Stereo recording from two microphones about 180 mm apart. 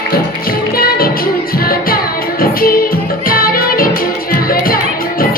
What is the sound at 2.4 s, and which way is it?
Music, 55° left (ahead or behind).